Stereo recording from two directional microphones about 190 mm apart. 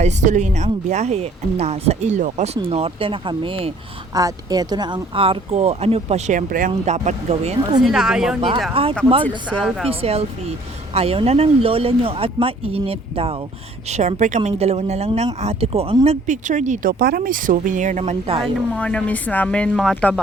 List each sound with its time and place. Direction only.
0.0 s speech: 40° right (ahead or behind)
7.8 s speech: 5° right (ahead or behind)
8.4 s speech: 25° right (ahead or behind)
9.2 s speech: 10° left (ahead or behind)
9.6 s speech: centre (ahead or behind)
9.9 s speech: 30° right (ahead or behind)
18.4 s speech: 5° left (ahead or behind)